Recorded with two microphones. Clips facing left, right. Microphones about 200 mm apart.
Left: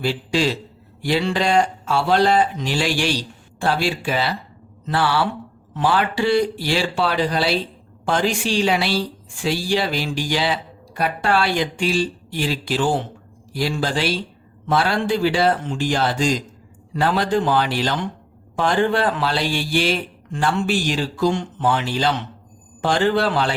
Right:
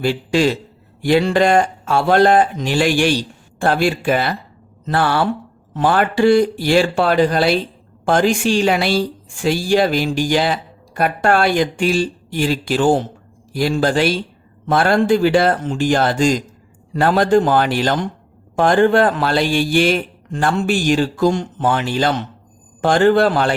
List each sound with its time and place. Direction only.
0.0 s a woman's voice: 50° right (ahead or behind)